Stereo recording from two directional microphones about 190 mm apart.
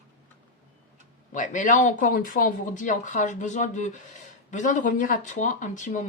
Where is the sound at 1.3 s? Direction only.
40° left (ahead or behind).